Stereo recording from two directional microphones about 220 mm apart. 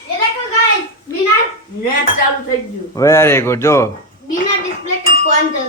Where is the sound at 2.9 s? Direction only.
15° left (ahead or behind).